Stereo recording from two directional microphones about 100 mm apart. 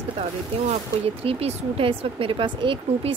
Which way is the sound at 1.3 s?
75° right (ahead or behind).